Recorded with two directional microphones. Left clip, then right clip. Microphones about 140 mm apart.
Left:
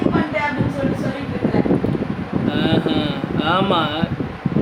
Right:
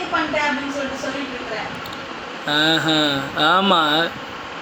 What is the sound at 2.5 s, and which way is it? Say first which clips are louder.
A man's voice: right 4 dB; 40° right (ahead or behind).